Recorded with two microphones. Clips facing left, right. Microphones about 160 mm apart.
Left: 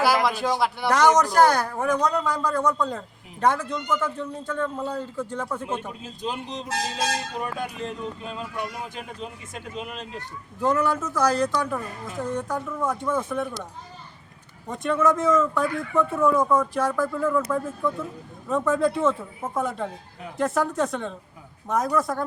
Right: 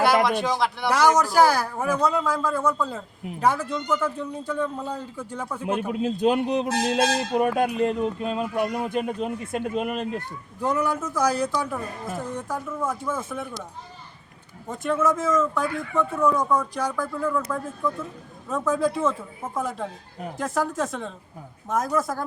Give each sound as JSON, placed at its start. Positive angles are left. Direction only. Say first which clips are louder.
{"t": 0.0, "sound": "a man's voice", "louder": "right 2 dB", "side_deg": 0}
{"t": 5.9, "sound": "speech", "louder": "right 11 dB", "side_deg": -60}
{"t": 10.6, "sound": "a man's voice", "louder": "left 2 dB", "side_deg": -10}
{"t": 14.7, "sound": "speech", "louder": "left 1 dB", "side_deg": 0}